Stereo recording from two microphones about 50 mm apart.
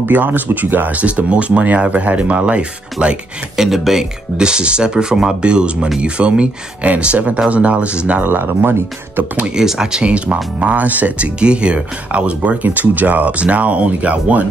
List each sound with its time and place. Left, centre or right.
0.0 s speech: right
3.5 s speech: centre; by 8.2 s right
8.2 s speech: right
9.6 s speech: centre; by 14.4 s right